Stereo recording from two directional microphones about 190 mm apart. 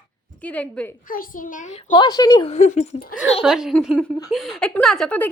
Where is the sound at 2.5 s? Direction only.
35° left (ahead or behind).